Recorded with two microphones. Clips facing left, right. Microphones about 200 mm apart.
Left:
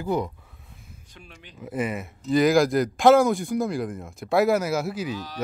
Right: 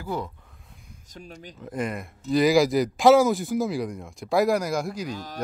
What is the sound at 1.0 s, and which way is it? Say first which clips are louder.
Speech: right 9 dB; 40° right (ahead or behind).